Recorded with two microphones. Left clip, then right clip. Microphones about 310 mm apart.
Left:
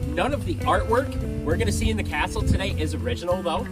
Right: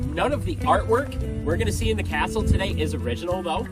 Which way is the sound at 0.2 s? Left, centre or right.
Centre.